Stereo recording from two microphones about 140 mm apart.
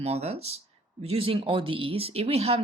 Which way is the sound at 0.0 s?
50° right (ahead or behind).